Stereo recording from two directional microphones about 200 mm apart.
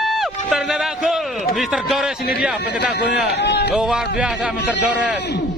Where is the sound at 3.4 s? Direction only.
60° left (ahead or behind).